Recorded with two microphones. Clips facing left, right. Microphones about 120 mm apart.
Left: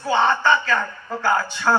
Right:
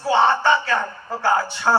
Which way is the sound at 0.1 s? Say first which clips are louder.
Right 1 dB; 25° right (ahead or behind).